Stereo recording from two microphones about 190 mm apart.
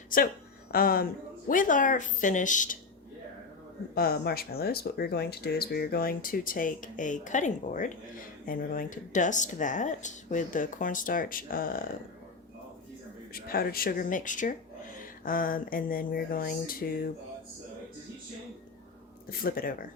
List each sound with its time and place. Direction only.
0.1 s speech: 45° left (ahead or behind)
3.9 s speech: 55° left (ahead or behind)
13.3 s speech: 50° left (ahead or behind)
19.3 s speech: 50° left (ahead or behind)